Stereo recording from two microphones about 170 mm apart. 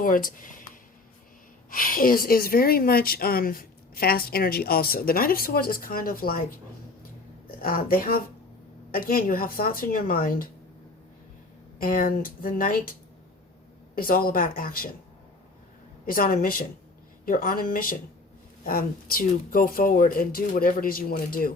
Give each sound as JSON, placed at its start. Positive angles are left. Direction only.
{"t": 0.0, "sound": "speech", "side_deg": 55}
{"t": 1.7, "sound": "speech", "side_deg": 55}
{"t": 7.6, "sound": "speech", "side_deg": 60}
{"t": 11.8, "sound": "speech", "side_deg": 55}
{"t": 16.0, "sound": "speech", "side_deg": 60}